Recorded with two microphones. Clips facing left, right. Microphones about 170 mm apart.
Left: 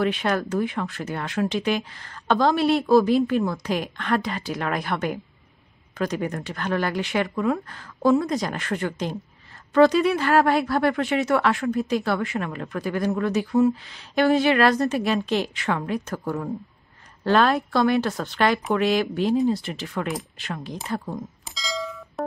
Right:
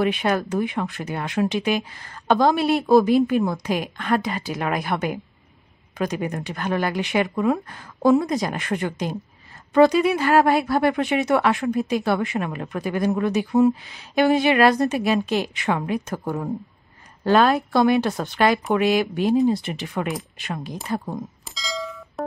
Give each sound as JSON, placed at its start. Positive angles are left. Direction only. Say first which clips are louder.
{"t": 0.0, "sound": "speech", "louder": "right 2 dB", "side_deg": -15}
{"t": 17.3, "sound": "a woman's voice", "louder": "right 2 dB", "side_deg": -5}
{"t": 17.7, "sound": "speech", "louder": "right 3 dB", "side_deg": -15}
{"t": 21.5, "sound": "doorbell", "louder": "left 2 dB", "side_deg": 0}